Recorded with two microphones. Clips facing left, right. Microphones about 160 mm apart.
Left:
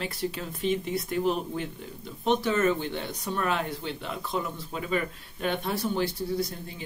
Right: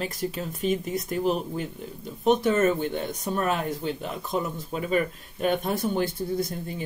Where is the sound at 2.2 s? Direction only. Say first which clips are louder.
Right 3 dB; 45° right (ahead or behind).